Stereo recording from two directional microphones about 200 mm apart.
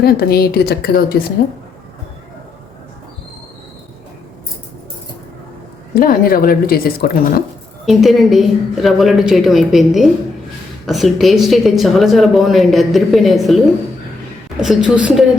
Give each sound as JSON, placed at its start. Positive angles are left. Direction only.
{"t": 0.0, "sound": "speech", "side_deg": 50}
{"t": 5.9, "sound": "speech", "side_deg": 45}
{"t": 7.9, "sound": "a woman's voice", "side_deg": 0}
{"t": 14.6, "sound": "a woman's voice", "side_deg": -5}